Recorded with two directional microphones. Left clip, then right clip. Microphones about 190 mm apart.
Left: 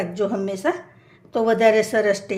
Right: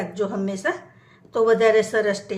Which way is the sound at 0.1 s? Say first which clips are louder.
Left 2 dB; 20° left (ahead or behind).